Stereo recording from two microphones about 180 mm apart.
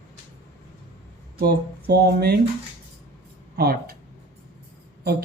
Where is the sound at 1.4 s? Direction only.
60° right (ahead or behind).